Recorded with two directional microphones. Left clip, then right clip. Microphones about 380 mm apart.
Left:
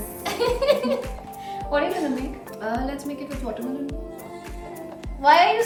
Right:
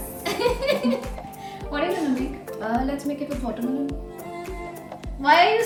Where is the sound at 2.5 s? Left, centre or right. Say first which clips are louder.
Right 2 dB; centre.